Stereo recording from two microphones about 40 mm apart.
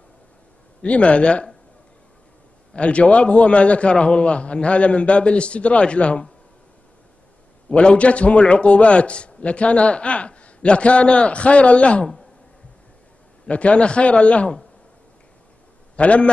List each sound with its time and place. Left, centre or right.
0.8 s a man's voice: left
2.7 s a man's voice: left
7.7 s a man's voice: left
13.5 s a man's voice: left
16.0 s a man's voice: left